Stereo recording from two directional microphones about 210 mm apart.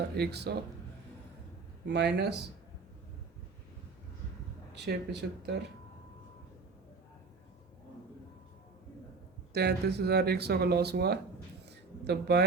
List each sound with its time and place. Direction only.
0.2 s speech: 50° right (ahead or behind)
1.9 s speech: 55° right (ahead or behind)
4.7 s speech: 55° right (ahead or behind)
9.5 s speech: 50° right (ahead or behind)
11.6 s a sound: 50° right (ahead or behind)